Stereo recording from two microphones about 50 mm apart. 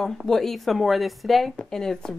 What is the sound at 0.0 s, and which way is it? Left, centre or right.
Speech, centre.